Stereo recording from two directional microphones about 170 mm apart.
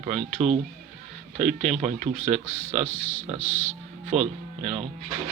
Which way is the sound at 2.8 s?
35° left (ahead or behind).